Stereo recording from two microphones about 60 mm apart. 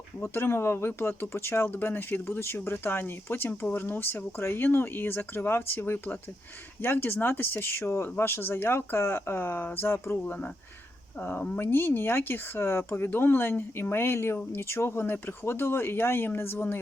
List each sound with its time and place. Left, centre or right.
0.2 s speech: left